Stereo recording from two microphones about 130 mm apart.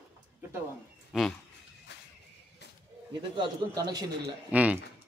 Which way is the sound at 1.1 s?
5° right (ahead or behind).